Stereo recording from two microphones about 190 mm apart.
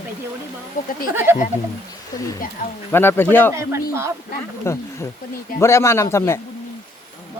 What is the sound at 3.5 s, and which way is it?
Speech, 15° right (ahead or behind).